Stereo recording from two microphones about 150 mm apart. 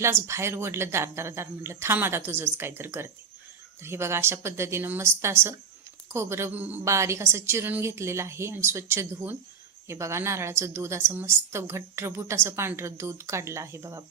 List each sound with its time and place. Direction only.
0.0 s a woman's voice: 15° right (ahead or behind)